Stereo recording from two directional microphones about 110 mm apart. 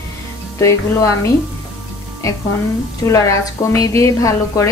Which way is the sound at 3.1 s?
30° left (ahead or behind).